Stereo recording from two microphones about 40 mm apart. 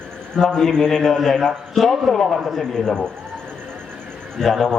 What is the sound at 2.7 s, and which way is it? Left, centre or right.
Speech, centre.